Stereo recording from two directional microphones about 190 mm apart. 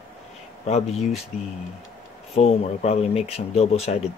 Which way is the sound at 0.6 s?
35° left (ahead or behind).